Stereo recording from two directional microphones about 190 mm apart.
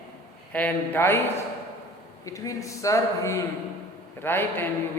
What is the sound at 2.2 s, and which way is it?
A man's voice, 15° left (ahead or behind).